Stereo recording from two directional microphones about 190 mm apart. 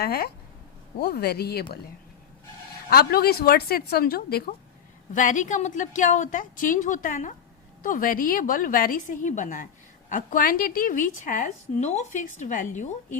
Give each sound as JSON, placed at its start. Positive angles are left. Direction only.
{"t": 0.0, "sound": "speech", "side_deg": 55}
{"t": 2.9, "sound": "a woman's voice", "side_deg": 55}
{"t": 5.1, "sound": "a woman's voice", "side_deg": 40}